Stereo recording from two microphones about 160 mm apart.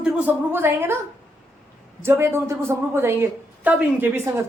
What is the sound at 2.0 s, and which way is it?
A woman's voice, 15° right (ahead or behind).